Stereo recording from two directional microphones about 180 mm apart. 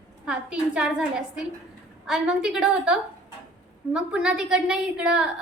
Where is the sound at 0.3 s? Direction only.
5° right (ahead or behind).